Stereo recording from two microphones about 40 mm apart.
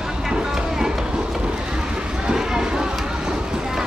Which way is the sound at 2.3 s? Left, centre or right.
Centre.